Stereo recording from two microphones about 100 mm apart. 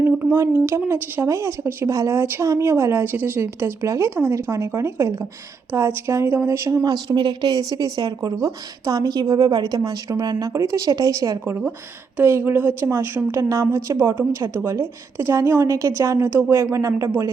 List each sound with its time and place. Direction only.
0.3 s a woman's voice: 25° right (ahead or behind)
12.1 s a woman's voice: 25° right (ahead or behind)